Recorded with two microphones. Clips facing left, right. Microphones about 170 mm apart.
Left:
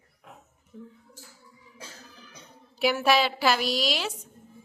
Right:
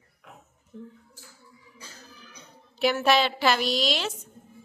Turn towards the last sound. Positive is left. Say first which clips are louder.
# right 1 dB
turn(degrees=5)  # may be behind; listen again after turning